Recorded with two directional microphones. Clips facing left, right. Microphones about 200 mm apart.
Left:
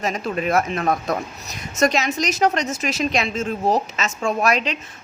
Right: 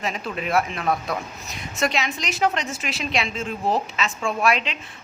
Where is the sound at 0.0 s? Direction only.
45° left (ahead or behind).